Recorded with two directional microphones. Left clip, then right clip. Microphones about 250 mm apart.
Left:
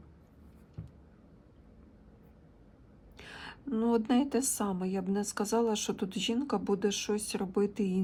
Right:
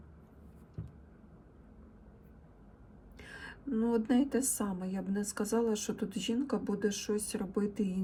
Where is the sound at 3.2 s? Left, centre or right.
Centre.